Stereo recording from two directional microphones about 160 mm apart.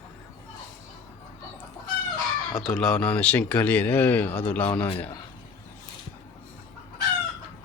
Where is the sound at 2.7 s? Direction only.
5° left (ahead or behind).